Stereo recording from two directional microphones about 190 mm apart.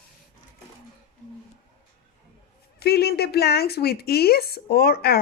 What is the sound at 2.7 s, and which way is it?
Speech, 55° left (ahead or behind).